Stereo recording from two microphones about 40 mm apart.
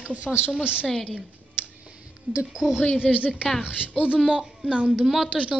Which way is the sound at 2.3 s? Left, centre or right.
Right.